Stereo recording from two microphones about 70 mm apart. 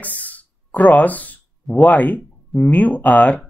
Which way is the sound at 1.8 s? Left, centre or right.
Left.